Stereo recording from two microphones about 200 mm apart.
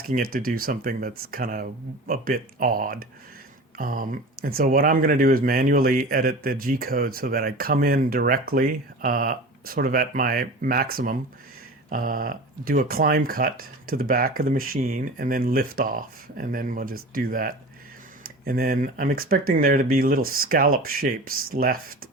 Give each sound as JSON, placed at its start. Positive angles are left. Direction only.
{"t": 0.1, "sound": "speech", "side_deg": -45}